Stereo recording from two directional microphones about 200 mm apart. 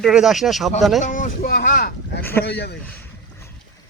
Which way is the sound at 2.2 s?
10° left (ahead or behind).